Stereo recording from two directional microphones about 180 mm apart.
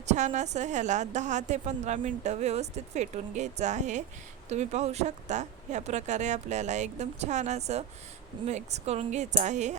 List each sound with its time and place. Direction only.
0.0 s a woman's voice: 40° right (ahead or behind)